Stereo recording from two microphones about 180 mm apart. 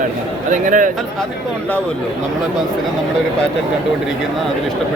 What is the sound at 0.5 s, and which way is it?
Speech, 45° right (ahead or behind).